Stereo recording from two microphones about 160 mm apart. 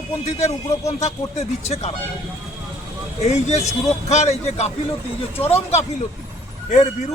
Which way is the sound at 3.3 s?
45° left (ahead or behind).